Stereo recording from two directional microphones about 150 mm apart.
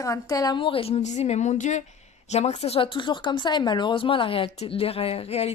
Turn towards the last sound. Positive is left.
turn(degrees=40)  # may be behind; listen again after turning